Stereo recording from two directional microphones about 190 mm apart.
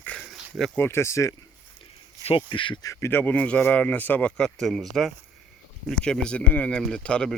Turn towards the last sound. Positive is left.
turn(degrees=5)  # may be behind; listen again after turning